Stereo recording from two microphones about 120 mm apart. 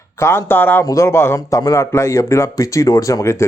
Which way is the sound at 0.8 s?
25° left (ahead or behind).